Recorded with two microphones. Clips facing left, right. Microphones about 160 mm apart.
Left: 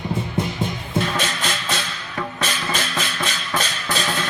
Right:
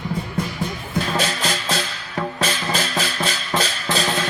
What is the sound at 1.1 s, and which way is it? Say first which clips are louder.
Music: right 2 dB; 35° right (ahead or behind).